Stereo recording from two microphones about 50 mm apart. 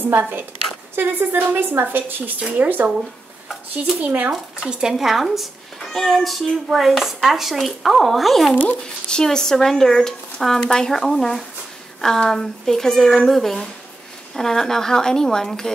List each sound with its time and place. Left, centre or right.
0.0 s a woman's voice: right
2.4 s speech: right
4.0 s speech: right
4.3 s speech: centre
5.8 s speech: centre
8.8 s speech: centre